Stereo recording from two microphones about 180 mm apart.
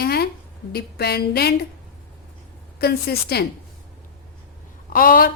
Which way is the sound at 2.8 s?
60° left (ahead or behind).